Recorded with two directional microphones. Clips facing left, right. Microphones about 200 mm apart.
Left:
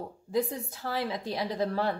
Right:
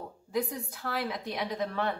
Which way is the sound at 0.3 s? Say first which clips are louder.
Left 2 dB; 30° left (ahead or behind).